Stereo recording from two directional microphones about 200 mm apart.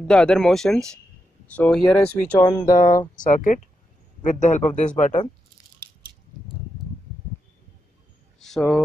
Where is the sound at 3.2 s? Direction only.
40° left (ahead or behind).